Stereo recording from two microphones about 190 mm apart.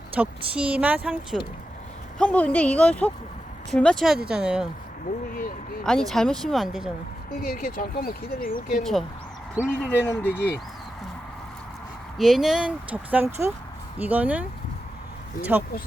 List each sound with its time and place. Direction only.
0.2 s speech: 5° right (ahead or behind)
2.1 s a woman's voice: 5° left (ahead or behind)
5.8 s speech: 5° left (ahead or behind)
7.3 s speech: 50° left (ahead or behind)
8.8 s a woman's voice: centre (ahead or behind)
12.1 s speech: centre (ahead or behind)
15.5 s speech: 10° right (ahead or behind)